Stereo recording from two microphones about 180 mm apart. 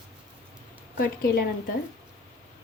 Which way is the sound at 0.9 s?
55° left (ahead or behind).